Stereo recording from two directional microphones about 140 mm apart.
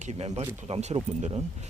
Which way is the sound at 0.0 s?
50° right (ahead or behind).